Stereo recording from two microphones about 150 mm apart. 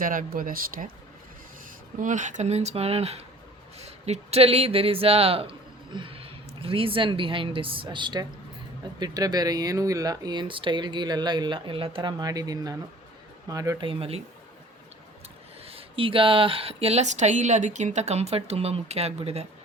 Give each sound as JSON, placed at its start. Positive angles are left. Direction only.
{"t": 0.0, "sound": "speech", "side_deg": -65}
{"t": 2.0, "sound": "speech", "side_deg": -55}
{"t": 12.2, "sound": "speech", "side_deg": -25}
{"t": 13.8, "sound": "speech", "side_deg": -40}
{"t": 15.6, "sound": "speech", "side_deg": -40}